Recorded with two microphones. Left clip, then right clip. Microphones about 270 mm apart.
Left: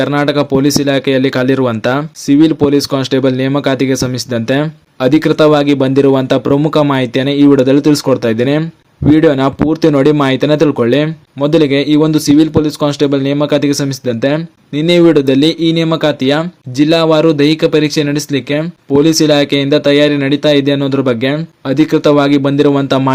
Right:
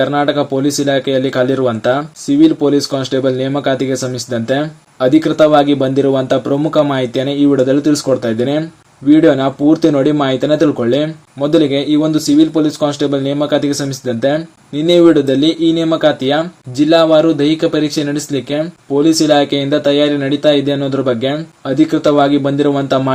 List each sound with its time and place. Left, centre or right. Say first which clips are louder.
0.0 s speech: left 1 dB; left